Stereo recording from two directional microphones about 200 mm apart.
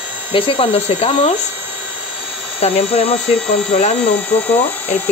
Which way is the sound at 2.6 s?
30° left (ahead or behind).